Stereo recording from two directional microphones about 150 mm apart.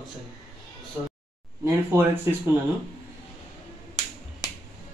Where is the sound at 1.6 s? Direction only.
15° right (ahead or behind).